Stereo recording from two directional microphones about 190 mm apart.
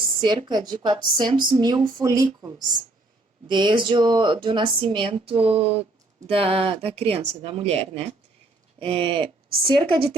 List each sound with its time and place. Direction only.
0.2 s a woman's voice: 25° right (ahead or behind)